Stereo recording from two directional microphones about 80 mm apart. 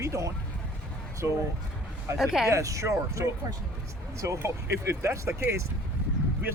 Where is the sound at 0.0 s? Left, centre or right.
Right.